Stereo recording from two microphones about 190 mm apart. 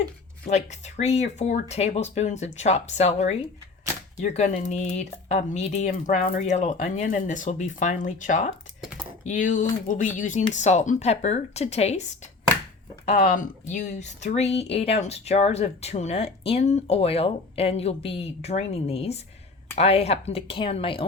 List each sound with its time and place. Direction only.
0.4 s speech: 35° left (ahead or behind)
13.1 s speech: 40° left (ahead or behind)